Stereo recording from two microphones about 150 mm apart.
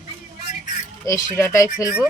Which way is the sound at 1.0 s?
20° left (ahead or behind).